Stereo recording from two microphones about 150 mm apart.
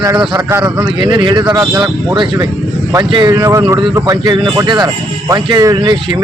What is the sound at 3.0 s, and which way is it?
Speech, 30° right (ahead or behind).